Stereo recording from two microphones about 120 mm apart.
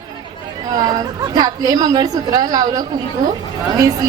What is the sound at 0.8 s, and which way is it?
A woman's voice, 35° right (ahead or behind).